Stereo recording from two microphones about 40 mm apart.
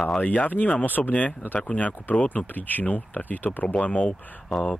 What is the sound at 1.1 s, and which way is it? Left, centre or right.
Speech, left.